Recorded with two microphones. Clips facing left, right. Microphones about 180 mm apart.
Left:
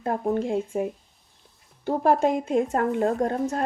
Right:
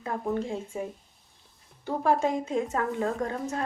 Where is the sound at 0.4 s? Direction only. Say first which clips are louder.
Left 7 dB; 60° left (ahead or behind).